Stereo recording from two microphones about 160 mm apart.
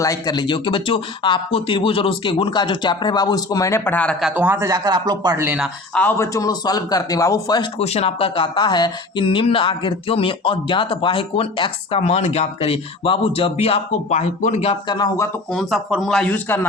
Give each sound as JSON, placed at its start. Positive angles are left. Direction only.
{"t": 0.0, "sound": "speech", "side_deg": 20}
{"t": 4.4, "sound": "speech", "side_deg": -15}
{"t": 5.4, "sound": "speech", "side_deg": -15}
{"t": 5.9, "sound": "speech", "side_deg": 10}
{"t": 7.8, "sound": "speech", "side_deg": 40}
{"t": 14.9, "sound": "speech", "side_deg": 25}
{"t": 15.5, "sound": "speech", "side_deg": 0}